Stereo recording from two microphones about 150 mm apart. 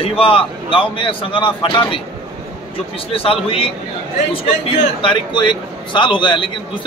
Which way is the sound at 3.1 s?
40° left (ahead or behind).